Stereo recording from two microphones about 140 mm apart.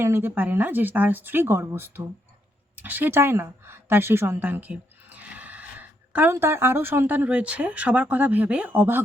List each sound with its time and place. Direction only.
0.0 s a woman's voice: 15° right (ahead or behind)